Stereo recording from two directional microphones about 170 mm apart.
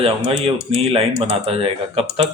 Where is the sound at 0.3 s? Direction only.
35° right (ahead or behind).